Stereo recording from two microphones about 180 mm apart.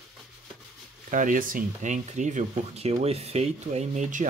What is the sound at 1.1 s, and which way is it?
Speech, 45° right (ahead or behind).